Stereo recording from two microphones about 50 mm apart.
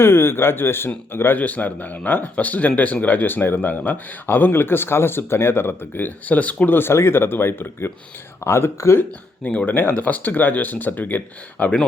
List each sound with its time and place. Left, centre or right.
0.0 s speech: left
1.4 s speech: left
6.7 s speech: left
9.4 s speech: left
11.5 s speech: left